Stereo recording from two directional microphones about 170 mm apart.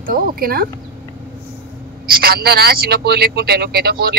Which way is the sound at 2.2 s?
65° right (ahead or behind).